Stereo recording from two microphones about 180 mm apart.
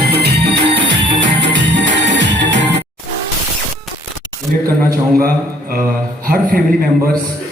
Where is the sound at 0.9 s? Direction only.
80° right.